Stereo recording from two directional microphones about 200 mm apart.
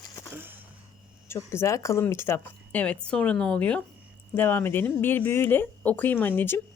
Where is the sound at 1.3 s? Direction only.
15° left (ahead or behind).